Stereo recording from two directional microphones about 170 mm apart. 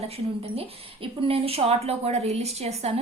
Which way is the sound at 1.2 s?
35° right (ahead or behind).